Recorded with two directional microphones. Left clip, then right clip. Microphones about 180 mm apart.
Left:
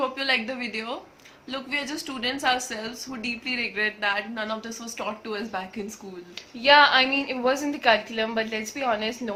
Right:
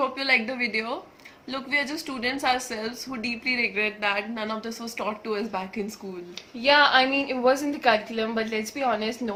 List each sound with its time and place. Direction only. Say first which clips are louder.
0.0 s a woman's voice: right 2 dB; 20° right (ahead or behind)
6.6 s a woman's voice: left 2 dB; centre (ahead or behind)